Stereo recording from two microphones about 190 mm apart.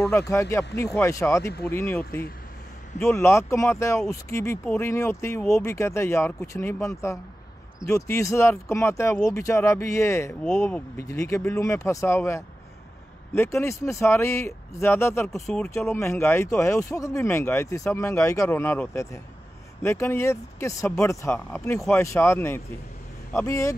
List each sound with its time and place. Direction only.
0.3 s speech: 15° left (ahead or behind)
3.2 s speech: 15° left (ahead or behind)